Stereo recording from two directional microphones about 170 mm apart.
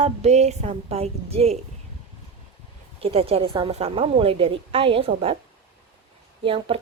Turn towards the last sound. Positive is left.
turn(degrees=-30)  # may be behind; listen again after turning